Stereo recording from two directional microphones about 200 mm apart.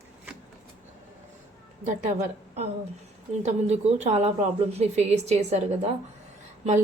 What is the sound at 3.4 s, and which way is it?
Speech, 35° right (ahead or behind).